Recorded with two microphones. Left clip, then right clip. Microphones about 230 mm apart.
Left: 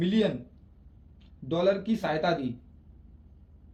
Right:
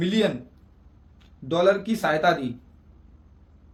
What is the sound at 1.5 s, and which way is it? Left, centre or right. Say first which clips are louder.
Speech: right 5 dB; centre.